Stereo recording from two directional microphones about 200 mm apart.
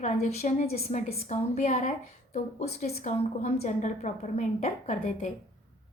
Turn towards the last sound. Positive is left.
turn(degrees=35)  # may be behind; listen again after turning